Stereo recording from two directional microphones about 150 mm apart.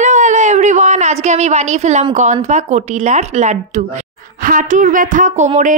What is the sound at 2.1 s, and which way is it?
Speech, 55° right (ahead or behind).